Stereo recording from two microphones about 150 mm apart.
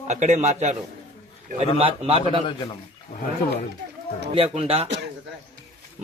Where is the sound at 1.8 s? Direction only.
40° right (ahead or behind).